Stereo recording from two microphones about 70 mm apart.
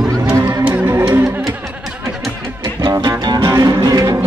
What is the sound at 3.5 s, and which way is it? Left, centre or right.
Music, right.